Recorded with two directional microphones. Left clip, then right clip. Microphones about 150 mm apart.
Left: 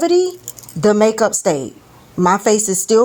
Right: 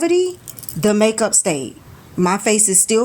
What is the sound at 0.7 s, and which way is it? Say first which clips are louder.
Speech: left 3 dB; centre (ahead or behind).